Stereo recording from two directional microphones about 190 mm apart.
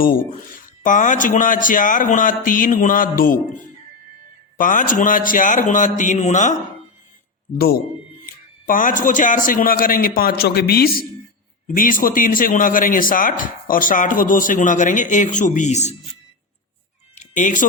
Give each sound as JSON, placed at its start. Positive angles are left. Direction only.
{"t": 0.3, "sound": "speech", "side_deg": 45}
{"t": 8.3, "sound": "speech", "side_deg": 45}
{"t": 17.2, "sound": "a sound", "side_deg": 40}